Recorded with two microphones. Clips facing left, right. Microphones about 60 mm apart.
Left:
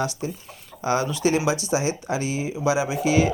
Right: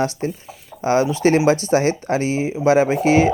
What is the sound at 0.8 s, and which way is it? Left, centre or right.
Speech, right.